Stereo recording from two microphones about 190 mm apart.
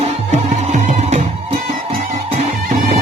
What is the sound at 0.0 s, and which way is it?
Music, 40° right (ahead or behind).